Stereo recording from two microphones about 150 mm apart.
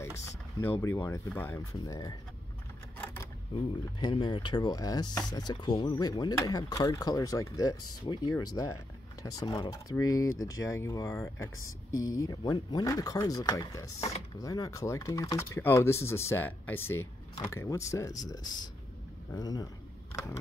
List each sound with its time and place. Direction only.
0.6 s speech: 15° left (ahead or behind)
4.0 s speech: 30° left (ahead or behind)